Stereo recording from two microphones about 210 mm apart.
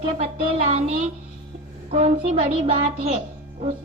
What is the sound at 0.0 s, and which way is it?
Music, 25° right (ahead or behind).